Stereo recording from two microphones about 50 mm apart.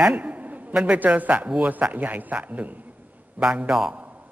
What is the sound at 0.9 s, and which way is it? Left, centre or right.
A man's voice, right.